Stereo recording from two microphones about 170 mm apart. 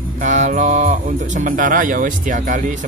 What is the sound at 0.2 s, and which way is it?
Speech, 45° right (ahead or behind).